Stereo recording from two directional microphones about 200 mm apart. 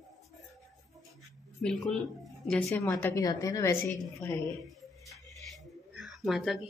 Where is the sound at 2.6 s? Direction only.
10° left (ahead or behind).